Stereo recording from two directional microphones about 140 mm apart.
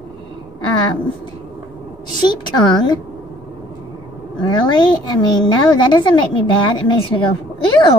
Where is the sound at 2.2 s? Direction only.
30° left (ahead or behind).